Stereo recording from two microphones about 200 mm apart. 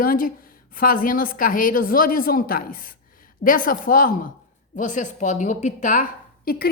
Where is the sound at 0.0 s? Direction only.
45° left (ahead or behind).